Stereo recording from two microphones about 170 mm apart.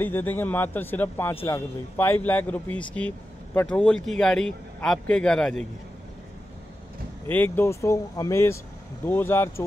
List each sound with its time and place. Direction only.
0.0 s a man's voice: 10° left (ahead or behind)
7.2 s a man's voice: 10° left (ahead or behind)